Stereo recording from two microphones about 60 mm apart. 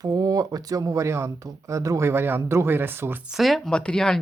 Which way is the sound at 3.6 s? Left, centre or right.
Centre.